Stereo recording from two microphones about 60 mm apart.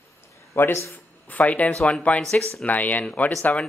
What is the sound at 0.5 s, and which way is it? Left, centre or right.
Speech, left.